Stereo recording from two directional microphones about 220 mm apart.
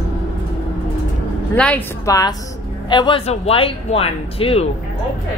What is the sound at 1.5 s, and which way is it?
Speech, 5° left (ahead or behind).